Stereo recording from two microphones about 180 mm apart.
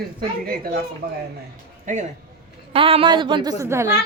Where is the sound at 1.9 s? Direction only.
45° right (ahead or behind).